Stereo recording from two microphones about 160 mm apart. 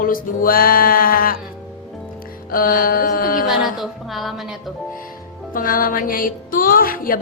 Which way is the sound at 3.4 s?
Centre (ahead or behind).